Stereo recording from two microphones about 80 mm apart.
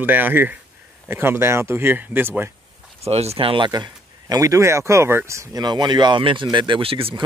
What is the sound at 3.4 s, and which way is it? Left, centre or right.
Speech, right.